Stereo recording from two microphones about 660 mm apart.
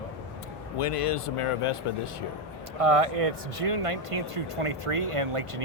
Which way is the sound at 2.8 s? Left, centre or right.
Right.